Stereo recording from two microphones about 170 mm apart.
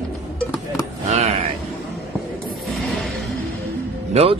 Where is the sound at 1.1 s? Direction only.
40° right (ahead or behind).